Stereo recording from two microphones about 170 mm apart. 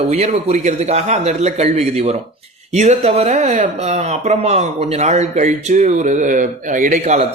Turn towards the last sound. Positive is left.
turn(degrees=-45)  # may be behind; listen again after turning